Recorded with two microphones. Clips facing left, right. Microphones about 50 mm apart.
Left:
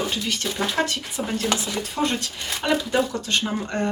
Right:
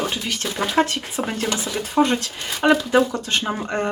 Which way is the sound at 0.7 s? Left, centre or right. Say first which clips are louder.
Right 4 dB; right.